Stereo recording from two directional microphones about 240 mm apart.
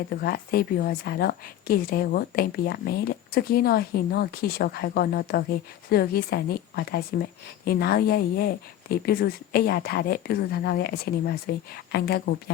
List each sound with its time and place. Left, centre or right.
0.1 s speech: left